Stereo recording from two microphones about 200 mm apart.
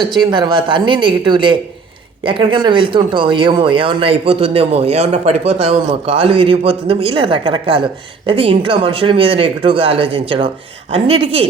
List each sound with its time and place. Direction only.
0.0 s speech: 25° right (ahead or behind)